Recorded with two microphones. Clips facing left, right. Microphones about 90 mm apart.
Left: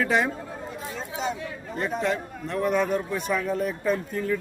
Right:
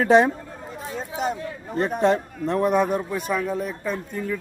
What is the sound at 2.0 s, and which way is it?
Speech, 35° right (ahead or behind).